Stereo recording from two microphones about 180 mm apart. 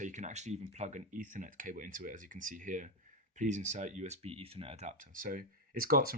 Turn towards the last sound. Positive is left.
turn(degrees=-55)  # may be behind; listen again after turning